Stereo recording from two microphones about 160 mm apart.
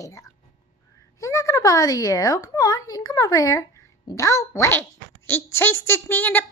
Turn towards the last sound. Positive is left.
turn(degrees=10)  # may be behind; listen again after turning